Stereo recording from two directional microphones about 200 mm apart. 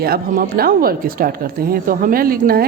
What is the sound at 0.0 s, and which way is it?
A woman's voice, 50° right (ahead or behind).